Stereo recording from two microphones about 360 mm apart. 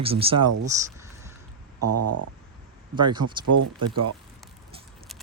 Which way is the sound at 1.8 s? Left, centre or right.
Right.